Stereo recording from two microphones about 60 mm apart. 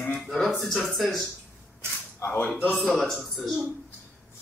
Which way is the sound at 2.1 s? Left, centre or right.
Left.